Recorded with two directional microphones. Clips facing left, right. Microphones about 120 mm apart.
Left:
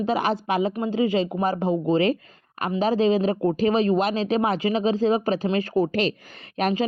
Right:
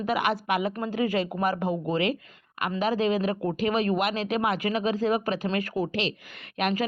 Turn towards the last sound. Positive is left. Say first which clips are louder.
# left 4 dB
turn(degrees=30)  # may be behind; listen again after turning